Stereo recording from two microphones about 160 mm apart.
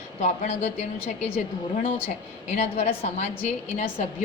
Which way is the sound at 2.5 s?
45° left (ahead or behind).